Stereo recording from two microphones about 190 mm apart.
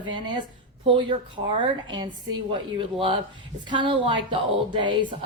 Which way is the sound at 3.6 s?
25° right (ahead or behind).